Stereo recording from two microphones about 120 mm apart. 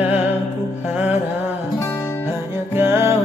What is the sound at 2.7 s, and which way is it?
Music, 20° right (ahead or behind).